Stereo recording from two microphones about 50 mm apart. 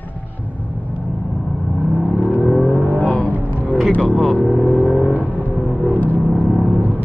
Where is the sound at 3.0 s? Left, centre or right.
Left.